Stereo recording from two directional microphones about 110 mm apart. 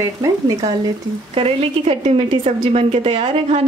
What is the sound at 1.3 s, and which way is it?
A woman's voice, 60° right (ahead or behind).